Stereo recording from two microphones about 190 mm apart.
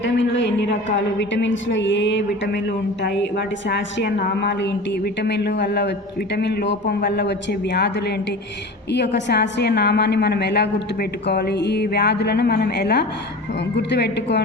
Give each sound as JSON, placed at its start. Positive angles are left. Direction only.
{"t": 0.0, "sound": "a woman's voice", "side_deg": 70}